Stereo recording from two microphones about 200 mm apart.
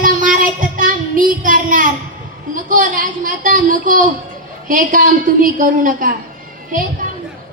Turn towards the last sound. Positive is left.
turn(degrees=-40)  # may be behind; listen again after turning